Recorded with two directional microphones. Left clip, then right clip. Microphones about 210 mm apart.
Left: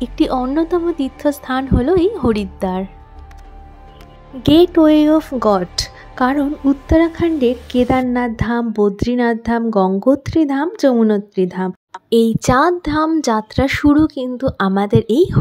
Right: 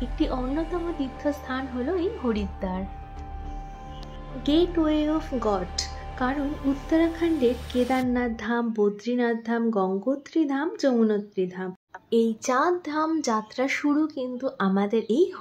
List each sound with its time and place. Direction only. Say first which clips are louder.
0.0 s a woman's voice: left 11 dB; 50° left (ahead or behind)
4.4 s a woman's voice: left 12 dB; 40° left (ahead or behind)